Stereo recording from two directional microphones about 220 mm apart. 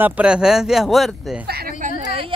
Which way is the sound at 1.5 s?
45° right (ahead or behind).